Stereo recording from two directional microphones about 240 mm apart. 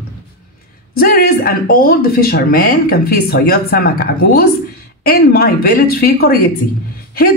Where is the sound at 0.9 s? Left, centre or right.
Left.